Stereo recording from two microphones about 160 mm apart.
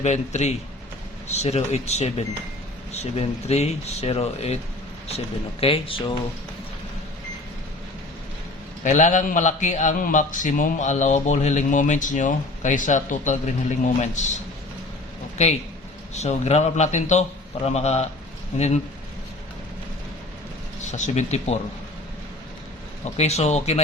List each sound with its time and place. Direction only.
0.0 s a man's voice: 45° left (ahead or behind)
8.8 s a man's voice: 50° left (ahead or behind)
15.4 s a man's voice: 45° left (ahead or behind)
20.8 s a man's voice: 45° left (ahead or behind)
23.0 s a man's voice: 40° left (ahead or behind)